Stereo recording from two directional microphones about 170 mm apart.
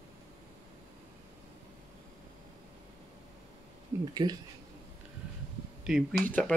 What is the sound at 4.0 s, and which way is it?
Speech, 25° right (ahead or behind).